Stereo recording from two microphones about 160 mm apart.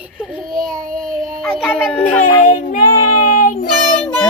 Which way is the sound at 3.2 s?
55° left (ahead or behind).